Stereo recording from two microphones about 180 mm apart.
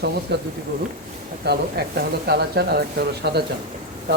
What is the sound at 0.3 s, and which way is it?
Speech, 70° right (ahead or behind).